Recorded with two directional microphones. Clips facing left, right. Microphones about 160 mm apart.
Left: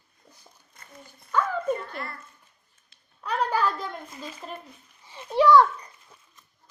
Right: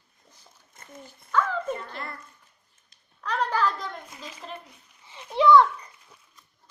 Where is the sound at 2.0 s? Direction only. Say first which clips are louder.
Left 1 dB; 20° right (ahead or behind).